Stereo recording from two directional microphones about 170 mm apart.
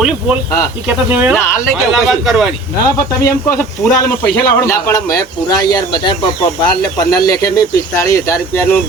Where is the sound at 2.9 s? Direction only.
20° left (ahead or behind).